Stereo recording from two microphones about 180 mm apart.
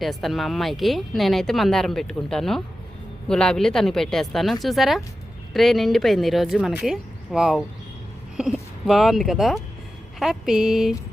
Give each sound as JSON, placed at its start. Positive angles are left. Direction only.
{"t": 0.0, "sound": "speech", "side_deg": 0}